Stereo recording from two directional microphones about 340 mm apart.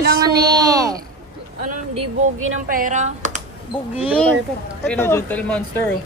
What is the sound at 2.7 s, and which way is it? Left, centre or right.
Speech, right.